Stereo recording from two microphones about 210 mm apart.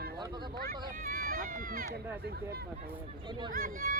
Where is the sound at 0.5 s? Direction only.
45° right (ahead or behind).